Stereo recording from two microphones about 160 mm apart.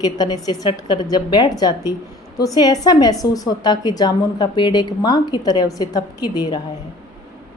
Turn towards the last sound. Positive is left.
turn(degrees=25)  # may be behind; listen again after turning